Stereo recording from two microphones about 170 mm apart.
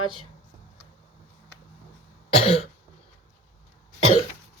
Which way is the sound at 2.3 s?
35° left (ahead or behind).